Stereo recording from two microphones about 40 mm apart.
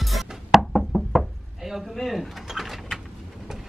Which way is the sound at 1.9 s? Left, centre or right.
Centre.